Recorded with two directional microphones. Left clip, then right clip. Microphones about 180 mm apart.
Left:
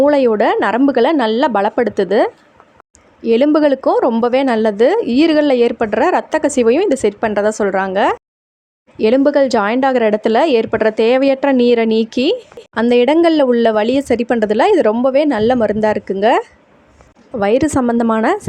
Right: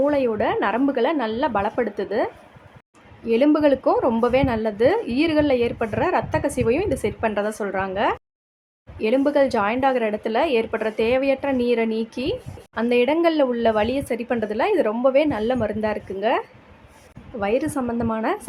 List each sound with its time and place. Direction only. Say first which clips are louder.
0.0 s a woman's voice: left 9 dB; 45° left (ahead or behind)